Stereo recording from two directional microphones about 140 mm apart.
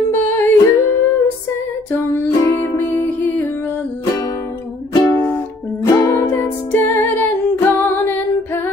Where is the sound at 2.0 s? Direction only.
25° left (ahead or behind).